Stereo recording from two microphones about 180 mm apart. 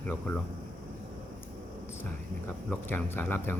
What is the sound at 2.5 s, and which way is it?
Speech, 5° left (ahead or behind).